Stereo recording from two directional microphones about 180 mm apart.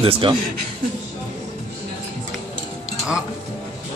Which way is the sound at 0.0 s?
30° right (ahead or behind).